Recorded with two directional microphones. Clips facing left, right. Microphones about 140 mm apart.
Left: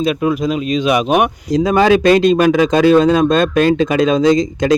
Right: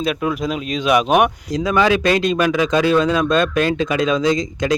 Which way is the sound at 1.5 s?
35° left (ahead or behind).